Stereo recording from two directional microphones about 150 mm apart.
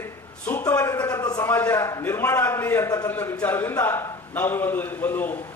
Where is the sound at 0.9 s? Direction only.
25° left (ahead or behind).